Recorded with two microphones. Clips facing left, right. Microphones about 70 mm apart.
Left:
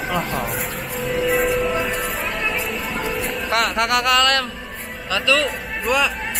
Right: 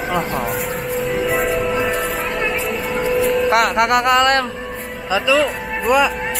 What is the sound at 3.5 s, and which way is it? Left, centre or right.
Speech, right.